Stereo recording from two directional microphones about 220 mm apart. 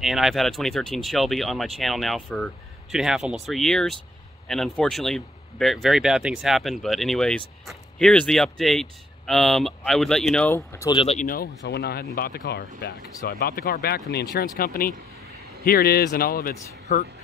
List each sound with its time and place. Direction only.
0.0 s speech: centre (ahead or behind)
10.9 s speech: 25° left (ahead or behind)
11.2 s speech: 45° left (ahead or behind)